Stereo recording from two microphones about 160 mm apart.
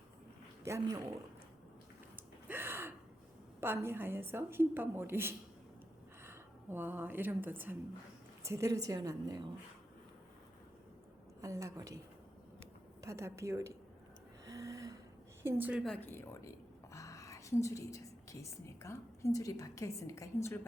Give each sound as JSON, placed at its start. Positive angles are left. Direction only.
{"t": 0.6, "sound": "a man's voice", "side_deg": -20}
{"t": 2.1, "sound": "gasp", "side_deg": -15}
{"t": 3.6, "sound": "a woman's voice", "side_deg": -15}
{"t": 11.3, "sound": "a woman's voice", "side_deg": -20}
{"t": 13.0, "sound": "a woman's voice", "side_deg": -20}
{"t": 14.4, "sound": "gasp", "side_deg": -20}
{"t": 15.4, "sound": "a woman's voice", "side_deg": -10}
{"t": 15.8, "sound": "a woman's voice", "side_deg": 10}